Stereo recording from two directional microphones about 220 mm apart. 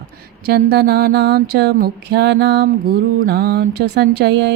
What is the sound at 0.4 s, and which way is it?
Music, 45° right (ahead or behind).